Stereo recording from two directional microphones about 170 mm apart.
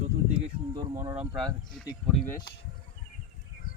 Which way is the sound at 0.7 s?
20° right (ahead or behind).